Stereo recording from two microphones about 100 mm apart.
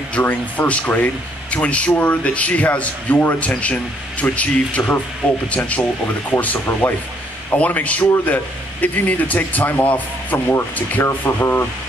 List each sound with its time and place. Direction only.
0.1 s speech: 15° left (ahead or behind)